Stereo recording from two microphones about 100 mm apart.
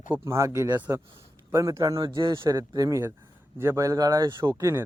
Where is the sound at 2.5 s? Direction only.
35° right (ahead or behind).